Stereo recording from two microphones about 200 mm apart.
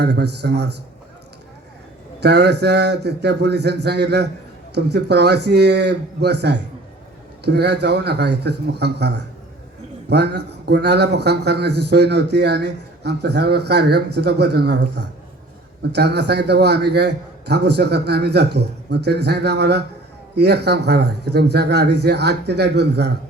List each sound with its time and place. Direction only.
0.0 s a man's voice: 55° right (ahead or behind)
2.2 s a man's voice: 55° right (ahead or behind)